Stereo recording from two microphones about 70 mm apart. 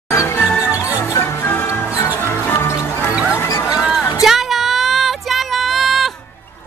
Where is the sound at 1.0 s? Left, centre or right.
Left.